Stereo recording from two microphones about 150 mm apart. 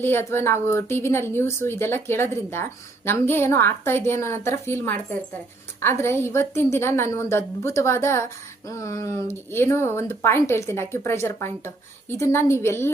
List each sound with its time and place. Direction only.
0.0 s a woman's voice: 15° left (ahead or behind)